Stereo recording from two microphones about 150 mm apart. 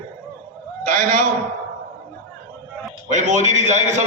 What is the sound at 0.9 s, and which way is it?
Speech, 60° right (ahead or behind).